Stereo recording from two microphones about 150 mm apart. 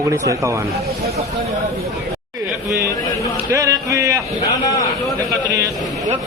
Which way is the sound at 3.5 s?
20° right (ahead or behind).